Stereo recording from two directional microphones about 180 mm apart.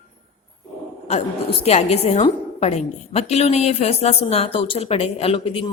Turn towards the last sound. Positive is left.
turn(degrees=30)  # may be behind; listen again after turning